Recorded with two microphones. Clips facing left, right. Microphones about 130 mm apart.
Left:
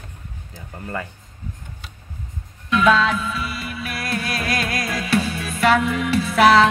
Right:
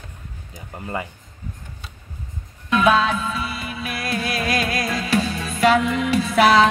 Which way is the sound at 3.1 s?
25° right (ahead or behind).